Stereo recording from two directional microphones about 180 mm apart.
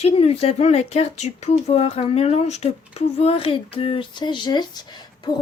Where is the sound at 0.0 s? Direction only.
35° left (ahead or behind).